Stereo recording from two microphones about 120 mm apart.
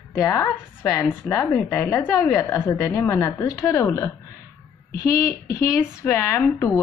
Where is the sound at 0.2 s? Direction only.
30° left (ahead or behind).